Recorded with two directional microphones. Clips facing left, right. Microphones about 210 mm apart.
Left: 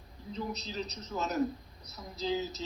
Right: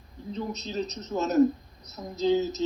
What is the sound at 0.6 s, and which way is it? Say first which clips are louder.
A man's voice: right 7 dB; 45° right (ahead or behind).